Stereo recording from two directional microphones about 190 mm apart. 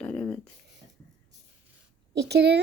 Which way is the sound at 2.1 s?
60° right (ahead or behind).